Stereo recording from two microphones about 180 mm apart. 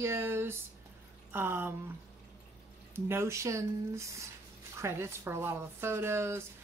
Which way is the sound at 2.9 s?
15° right (ahead or behind).